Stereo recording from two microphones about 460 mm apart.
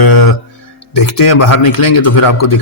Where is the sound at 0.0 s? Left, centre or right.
Left.